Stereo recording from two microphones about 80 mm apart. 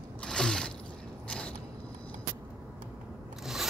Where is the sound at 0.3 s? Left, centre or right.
Centre.